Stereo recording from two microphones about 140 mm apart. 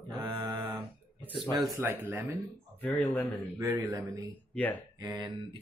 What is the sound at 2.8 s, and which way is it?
Speech, 10° left (ahead or behind).